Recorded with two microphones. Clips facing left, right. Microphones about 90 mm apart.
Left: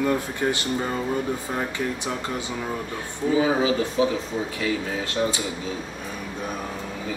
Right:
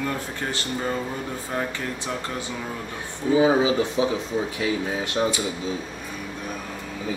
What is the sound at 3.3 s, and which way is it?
Speech, 20° right (ahead or behind).